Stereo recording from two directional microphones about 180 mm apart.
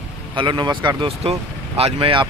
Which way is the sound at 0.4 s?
25° right (ahead or behind).